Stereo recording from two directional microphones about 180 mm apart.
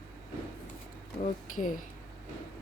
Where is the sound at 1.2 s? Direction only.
50° left (ahead or behind).